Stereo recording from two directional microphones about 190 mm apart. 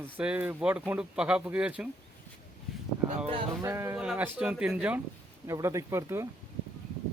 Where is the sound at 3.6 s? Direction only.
15° right (ahead or behind).